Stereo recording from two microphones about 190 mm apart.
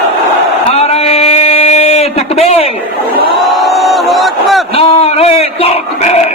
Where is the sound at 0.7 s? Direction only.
35° left (ahead or behind).